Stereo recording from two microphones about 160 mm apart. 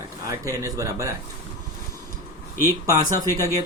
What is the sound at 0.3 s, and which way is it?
Speech, 20° right (ahead or behind).